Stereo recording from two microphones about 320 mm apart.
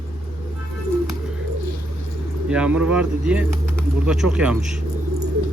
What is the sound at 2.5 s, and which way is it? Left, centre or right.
Speech, centre.